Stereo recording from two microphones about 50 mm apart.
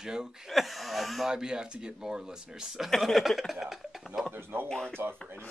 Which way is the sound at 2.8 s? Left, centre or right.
Centre.